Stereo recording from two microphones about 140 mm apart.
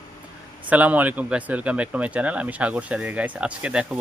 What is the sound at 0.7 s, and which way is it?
Speech, 10° right (ahead or behind).